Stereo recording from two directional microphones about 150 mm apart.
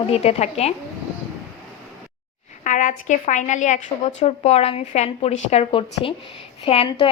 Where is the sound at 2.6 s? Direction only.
55° left (ahead or behind); by 6.9 s 40° left (ahead or behind).